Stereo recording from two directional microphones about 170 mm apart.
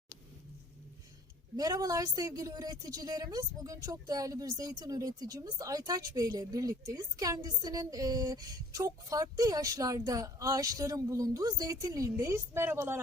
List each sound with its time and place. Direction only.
1.5 s a woman's voice: 20° right (ahead or behind)